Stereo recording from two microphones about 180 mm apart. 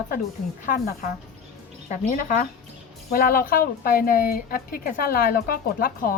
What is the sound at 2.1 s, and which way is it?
A woman's voice, 50° left (ahead or behind).